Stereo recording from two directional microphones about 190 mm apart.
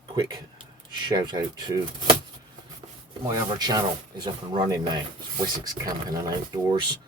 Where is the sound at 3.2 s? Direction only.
20° right (ahead or behind).